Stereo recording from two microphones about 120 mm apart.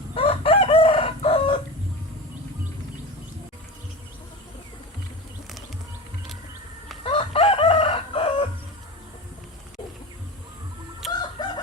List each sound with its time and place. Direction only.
0.1 s chicken: 50° left (ahead or behind)
7.0 s chicken: 50° left (ahead or behind)
11.0 s chicken: centre (ahead or behind)
11.4 s chicken: 35° left (ahead or behind)